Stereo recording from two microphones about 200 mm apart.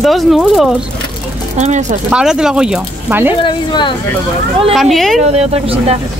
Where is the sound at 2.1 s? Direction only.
5° right (ahead or behind).